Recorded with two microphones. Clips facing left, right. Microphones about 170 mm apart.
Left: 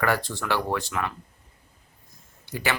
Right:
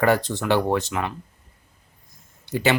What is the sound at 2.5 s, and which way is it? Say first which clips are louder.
Speech: right 7 dB; 25° right (ahead or behind).